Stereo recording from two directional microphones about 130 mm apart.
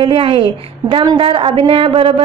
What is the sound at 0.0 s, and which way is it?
A woman's voice, 45° right (ahead or behind).